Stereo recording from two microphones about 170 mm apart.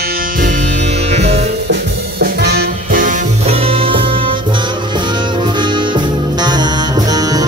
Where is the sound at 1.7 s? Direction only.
75° right (ahead or behind); by 7.4 s 20° right (ahead or behind).